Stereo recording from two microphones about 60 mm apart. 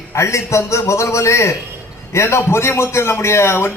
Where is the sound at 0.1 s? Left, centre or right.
Left.